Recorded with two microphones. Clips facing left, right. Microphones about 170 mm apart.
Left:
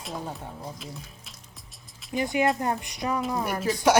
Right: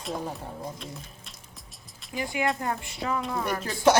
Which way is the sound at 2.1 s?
20° left (ahead or behind).